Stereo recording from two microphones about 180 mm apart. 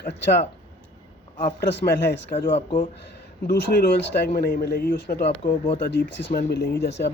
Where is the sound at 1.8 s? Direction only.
70° left (ahead or behind).